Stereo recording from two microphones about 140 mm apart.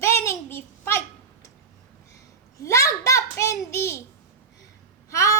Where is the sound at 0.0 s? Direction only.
20° left (ahead or behind).